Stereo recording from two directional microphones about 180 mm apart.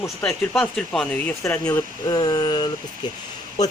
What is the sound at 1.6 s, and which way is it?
Speech, 20° left (ahead or behind).